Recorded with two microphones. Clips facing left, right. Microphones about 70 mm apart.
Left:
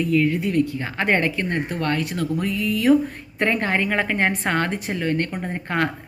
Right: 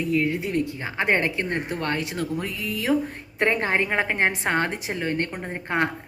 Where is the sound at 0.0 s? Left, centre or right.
Right.